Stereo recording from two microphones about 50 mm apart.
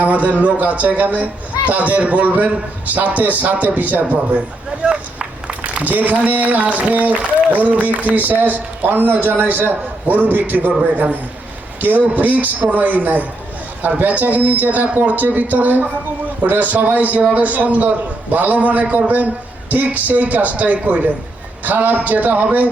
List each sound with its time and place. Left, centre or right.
0.0 s a man's voice: right
11.8 s a man's voice: right